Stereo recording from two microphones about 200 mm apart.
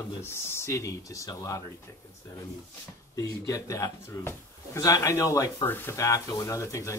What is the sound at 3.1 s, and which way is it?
Speech, 15° left (ahead or behind).